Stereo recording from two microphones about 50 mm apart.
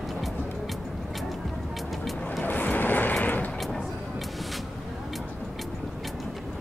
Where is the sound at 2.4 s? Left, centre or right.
Left.